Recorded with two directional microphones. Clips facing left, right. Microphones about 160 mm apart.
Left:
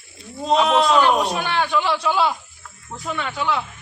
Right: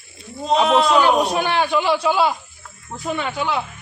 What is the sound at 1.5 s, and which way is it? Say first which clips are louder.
A man's voice: right 2 dB; 10° right (ahead or behind).